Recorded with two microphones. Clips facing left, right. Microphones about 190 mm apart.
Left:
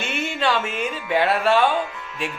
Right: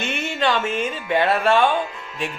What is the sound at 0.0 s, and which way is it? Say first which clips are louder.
Music: right 1 dB; 5° left (ahead or behind).